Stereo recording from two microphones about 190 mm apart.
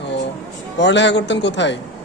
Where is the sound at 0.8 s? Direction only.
70° left (ahead or behind).